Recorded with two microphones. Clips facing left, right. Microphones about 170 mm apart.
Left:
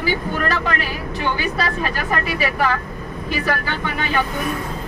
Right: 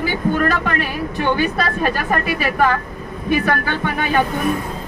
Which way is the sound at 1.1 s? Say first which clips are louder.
Right 4 dB; 55° right (ahead or behind).